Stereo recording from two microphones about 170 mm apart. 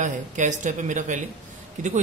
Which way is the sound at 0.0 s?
45° right (ahead or behind).